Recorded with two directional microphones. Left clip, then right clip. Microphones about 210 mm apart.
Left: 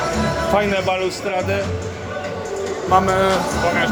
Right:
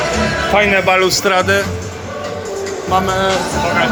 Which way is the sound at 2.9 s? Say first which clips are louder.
Even; centre (ahead or behind).